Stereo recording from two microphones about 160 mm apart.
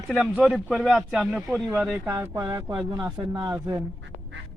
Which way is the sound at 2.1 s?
20° right (ahead or behind).